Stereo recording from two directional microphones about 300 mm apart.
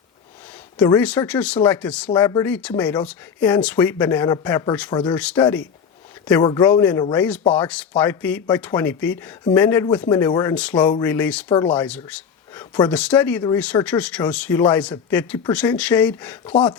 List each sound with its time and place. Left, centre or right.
0.8 s speech: centre
7.4 s speech: centre
7.7 s speech: centre
11.4 s speech: centre
11.7 s speech: centre